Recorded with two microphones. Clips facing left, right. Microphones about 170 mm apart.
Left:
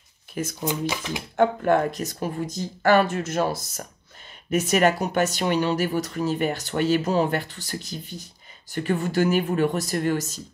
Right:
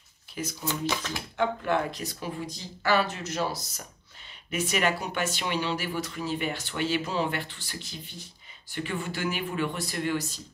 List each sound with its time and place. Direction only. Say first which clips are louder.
0.3 s speech: left 5 dB; 50° left (ahead or behind)
0.7 s speech: left 2 dB; 15° left (ahead or behind)
1.3 s speech: left 7 dB; 45° left (ahead or behind)